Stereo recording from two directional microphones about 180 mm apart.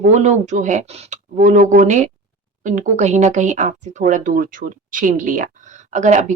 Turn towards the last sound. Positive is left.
turn(degrees=-40)  # may be behind; listen again after turning